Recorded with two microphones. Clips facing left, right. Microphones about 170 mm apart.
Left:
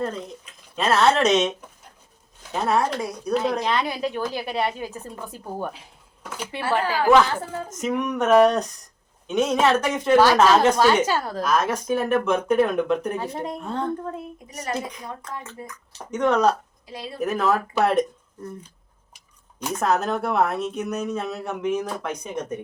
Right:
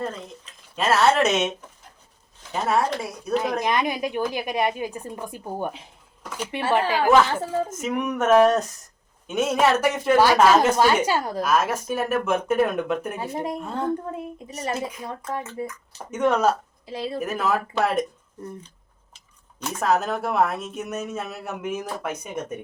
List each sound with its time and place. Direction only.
0.8 s speech: 5° right (ahead or behind)
2.5 s a woman's voice: 5° right (ahead or behind); by 7.0 s 20° right (ahead or behind)
7.8 s a woman's voice: 5° right (ahead or behind)
16.8 s speech: 25° right (ahead or behind)
17.2 s speech: 5° right (ahead or behind)
19.1 s a sound: 10° left (ahead or behind)
19.8 s speech: centre (ahead or behind)